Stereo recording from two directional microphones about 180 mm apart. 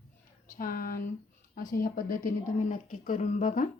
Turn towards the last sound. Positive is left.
turn(degrees=45)  # may be behind; listen again after turning